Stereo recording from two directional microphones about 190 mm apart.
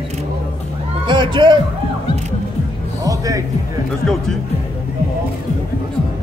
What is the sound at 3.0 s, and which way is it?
Music, 20° right (ahead or behind).